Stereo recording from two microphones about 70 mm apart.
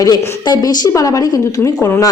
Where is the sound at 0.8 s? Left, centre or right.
Left.